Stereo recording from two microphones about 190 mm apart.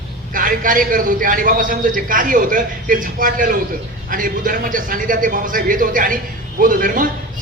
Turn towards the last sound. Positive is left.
turn(degrees=-45)  # may be behind; listen again after turning